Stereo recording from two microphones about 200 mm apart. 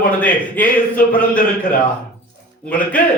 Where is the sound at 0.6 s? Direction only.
45° left (ahead or behind).